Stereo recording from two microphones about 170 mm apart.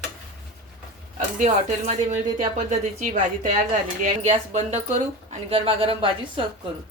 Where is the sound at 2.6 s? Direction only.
50° right (ahead or behind); by 6.4 s 30° right (ahead or behind).